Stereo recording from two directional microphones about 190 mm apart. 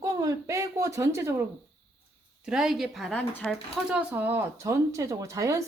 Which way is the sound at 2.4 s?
5° right (ahead or behind).